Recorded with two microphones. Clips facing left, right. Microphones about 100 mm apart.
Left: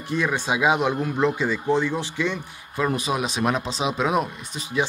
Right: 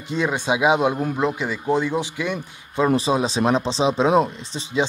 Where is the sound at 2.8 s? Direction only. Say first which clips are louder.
Right 5 dB; 30° right (ahead or behind).